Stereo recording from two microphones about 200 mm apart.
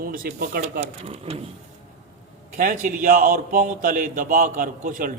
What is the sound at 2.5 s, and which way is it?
A man's voice, 40° right (ahead or behind).